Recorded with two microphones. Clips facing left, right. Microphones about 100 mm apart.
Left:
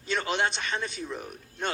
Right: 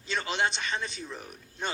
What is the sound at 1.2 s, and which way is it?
Speech, 55° left (ahead or behind).